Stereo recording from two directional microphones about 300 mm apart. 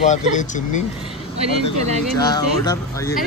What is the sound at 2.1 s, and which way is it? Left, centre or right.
Speech, centre.